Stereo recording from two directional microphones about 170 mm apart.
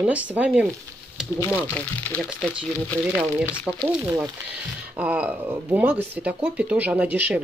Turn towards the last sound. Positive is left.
turn(degrees=-10)  # may be behind; listen again after turning